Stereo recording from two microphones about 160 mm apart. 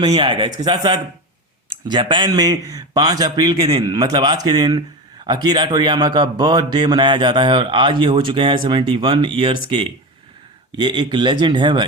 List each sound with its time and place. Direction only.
0.0 s a man's voice: 35° right (ahead or behind)